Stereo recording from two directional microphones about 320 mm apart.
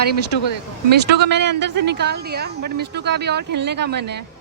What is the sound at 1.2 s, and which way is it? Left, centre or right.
Speech, right.